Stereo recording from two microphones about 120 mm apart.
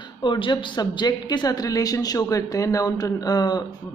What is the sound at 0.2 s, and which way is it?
A woman's voice, 40° left (ahead or behind).